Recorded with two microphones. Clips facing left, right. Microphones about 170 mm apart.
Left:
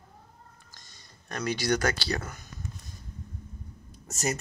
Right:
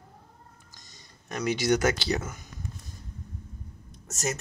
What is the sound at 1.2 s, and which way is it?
Speech, 15° right (ahead or behind).